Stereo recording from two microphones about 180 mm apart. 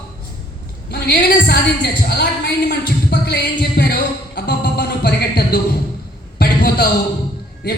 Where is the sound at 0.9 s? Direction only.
60° left (ahead or behind).